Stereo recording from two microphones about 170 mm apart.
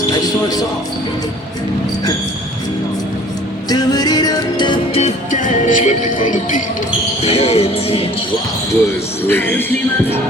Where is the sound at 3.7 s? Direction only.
25° left (ahead or behind).